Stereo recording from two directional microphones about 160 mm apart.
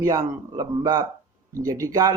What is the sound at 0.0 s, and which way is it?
Speech, 20° right (ahead or behind).